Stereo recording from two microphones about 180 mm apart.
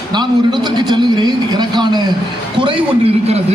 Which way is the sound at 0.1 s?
25° right (ahead or behind).